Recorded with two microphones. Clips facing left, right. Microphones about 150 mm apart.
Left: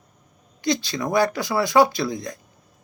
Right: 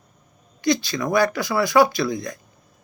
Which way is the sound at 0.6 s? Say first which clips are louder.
Right 2 dB; 25° left (ahead or behind).